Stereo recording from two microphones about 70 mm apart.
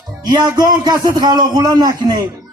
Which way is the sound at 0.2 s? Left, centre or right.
Right.